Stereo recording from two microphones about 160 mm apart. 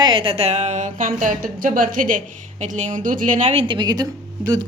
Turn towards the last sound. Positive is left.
turn(degrees=-25)  # may be behind; listen again after turning